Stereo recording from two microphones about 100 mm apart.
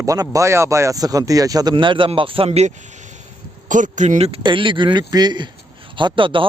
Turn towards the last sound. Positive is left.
turn(degrees=-55)  # may be behind; listen again after turning